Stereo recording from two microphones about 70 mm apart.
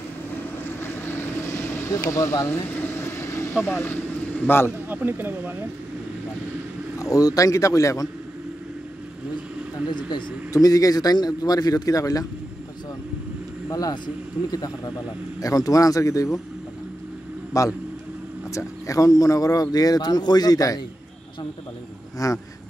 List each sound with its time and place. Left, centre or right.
0.7 s vehicle: left
2.0 s a man's voice: left
2.4 s vehicle: left
3.6 s speech: left
4.8 s speech: right
7.0 s a man's voice: left
9.8 s speech: left
10.5 s speech: left
13.7 s speech: left
17.5 s speech: left
22.2 s speech: left